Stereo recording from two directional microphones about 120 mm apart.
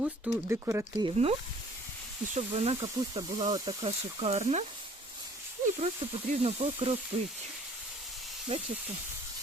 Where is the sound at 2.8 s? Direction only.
30° right (ahead or behind).